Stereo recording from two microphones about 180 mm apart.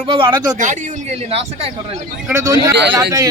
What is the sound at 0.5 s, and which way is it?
A man's voice, 40° right (ahead or behind).